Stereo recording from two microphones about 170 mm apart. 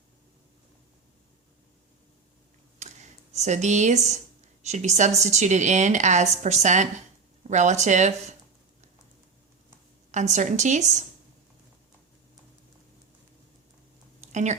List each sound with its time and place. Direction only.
2.7 s speech: 45° right (ahead or behind)
10.1 s speech: 45° right (ahead or behind)
14.2 s a sound: 45° right (ahead or behind)